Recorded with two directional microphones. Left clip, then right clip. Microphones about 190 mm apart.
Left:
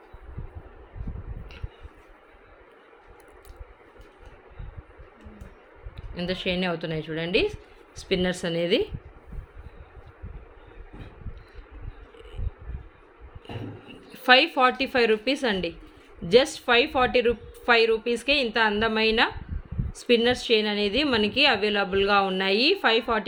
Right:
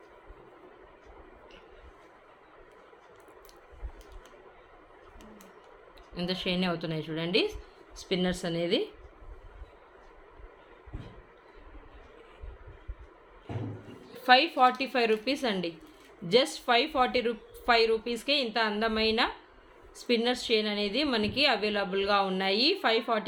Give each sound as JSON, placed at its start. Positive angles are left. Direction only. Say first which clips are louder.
{"t": 6.1, "sound": "a woman's voice", "louder": "left 4 dB", "side_deg": 20}
{"t": 14.1, "sound": "a woman's voice", "louder": "left 4 dB", "side_deg": 40}